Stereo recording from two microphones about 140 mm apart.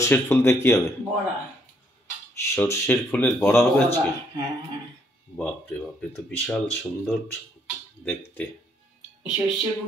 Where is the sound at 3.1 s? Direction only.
5° left (ahead or behind).